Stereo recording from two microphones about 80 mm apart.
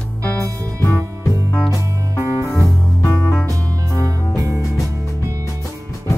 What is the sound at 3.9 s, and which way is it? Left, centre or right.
Music, right.